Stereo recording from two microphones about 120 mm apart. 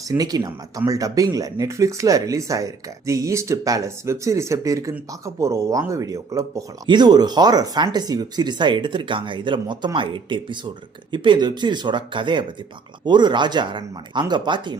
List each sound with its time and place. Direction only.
0.1 s speech: 30° right (ahead or behind)